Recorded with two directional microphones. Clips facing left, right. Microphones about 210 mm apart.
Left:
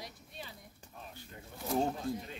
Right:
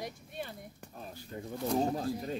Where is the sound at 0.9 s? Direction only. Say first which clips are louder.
Right 3 dB; 40° right (ahead or behind).